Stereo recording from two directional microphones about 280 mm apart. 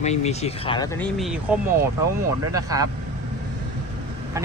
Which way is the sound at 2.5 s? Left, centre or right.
Centre.